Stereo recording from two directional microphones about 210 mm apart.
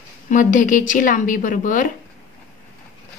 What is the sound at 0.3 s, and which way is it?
Speech, 40° left (ahead or behind).